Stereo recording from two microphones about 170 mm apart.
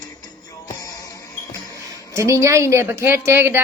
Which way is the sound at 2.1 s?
20° right (ahead or behind).